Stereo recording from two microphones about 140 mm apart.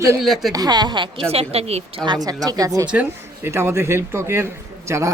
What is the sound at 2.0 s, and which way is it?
Speech, 30° right (ahead or behind).